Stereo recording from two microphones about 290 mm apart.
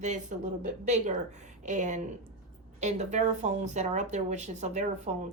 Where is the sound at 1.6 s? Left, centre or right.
Right.